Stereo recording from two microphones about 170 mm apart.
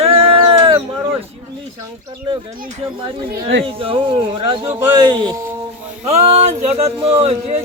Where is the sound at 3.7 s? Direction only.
30° right (ahead or behind).